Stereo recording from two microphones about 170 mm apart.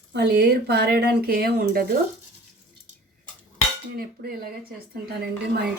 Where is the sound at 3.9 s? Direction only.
60° right (ahead or behind).